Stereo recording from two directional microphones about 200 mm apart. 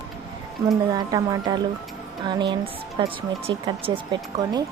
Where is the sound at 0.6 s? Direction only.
15° right (ahead or behind).